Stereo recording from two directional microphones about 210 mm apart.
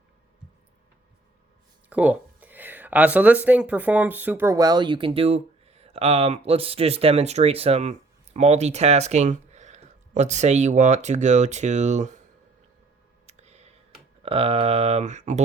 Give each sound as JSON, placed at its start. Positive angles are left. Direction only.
{"t": 1.9, "sound": "speech", "side_deg": -5}
{"t": 13.2, "sound": "a sound", "side_deg": -30}
{"t": 14.2, "sound": "speech", "side_deg": -25}